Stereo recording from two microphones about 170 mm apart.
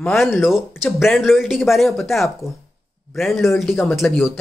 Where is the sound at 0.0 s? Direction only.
Centre (ahead or behind).